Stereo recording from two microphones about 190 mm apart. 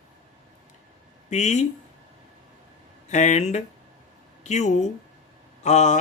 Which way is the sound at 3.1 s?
40° left (ahead or behind).